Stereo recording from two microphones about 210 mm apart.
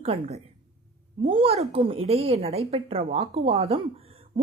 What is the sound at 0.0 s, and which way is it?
Speech, 30° right (ahead or behind).